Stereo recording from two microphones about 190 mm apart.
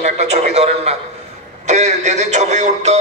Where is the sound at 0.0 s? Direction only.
35° right (ahead or behind).